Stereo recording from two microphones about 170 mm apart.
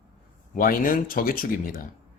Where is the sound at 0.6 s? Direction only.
55° left (ahead or behind).